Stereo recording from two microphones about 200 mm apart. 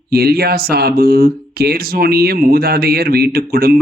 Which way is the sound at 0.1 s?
50° right (ahead or behind).